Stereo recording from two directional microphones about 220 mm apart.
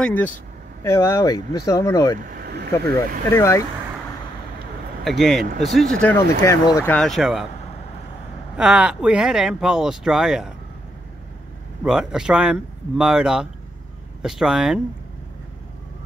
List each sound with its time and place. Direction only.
0.0 s speech: 5° left (ahead or behind)
2.2 s a sound: 45° right (ahead or behind)
3.3 s speech: 10° left (ahead or behind)
5.0 s speech: centre (ahead or behind)
8.5 s speech: 5° right (ahead or behind)
11.8 s speech: 5° right (ahead or behind)